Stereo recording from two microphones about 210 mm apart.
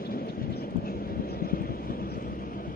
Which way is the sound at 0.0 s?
45° left (ahead or behind).